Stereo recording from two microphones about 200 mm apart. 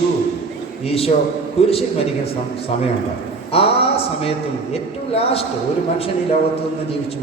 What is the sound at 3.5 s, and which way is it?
A man's voice, 30° left (ahead or behind).